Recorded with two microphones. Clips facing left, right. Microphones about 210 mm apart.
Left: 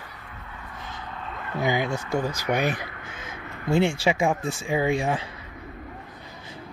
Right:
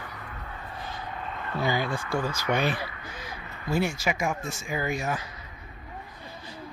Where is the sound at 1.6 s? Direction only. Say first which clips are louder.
Left 3 dB; 20° left (ahead or behind).